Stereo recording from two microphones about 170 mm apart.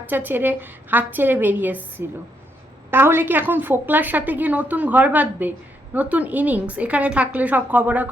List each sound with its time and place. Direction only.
0.0 s a woman's voice: 10° right (ahead or behind)